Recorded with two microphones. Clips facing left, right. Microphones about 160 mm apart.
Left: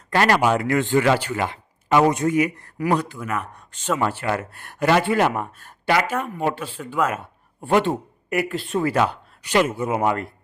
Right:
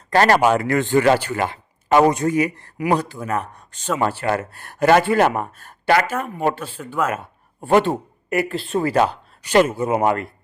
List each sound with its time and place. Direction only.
0.1 s speech: 40° right (ahead or behind)
6.1 s speech: 5° right (ahead or behind)
7.6 s speech: 45° right (ahead or behind)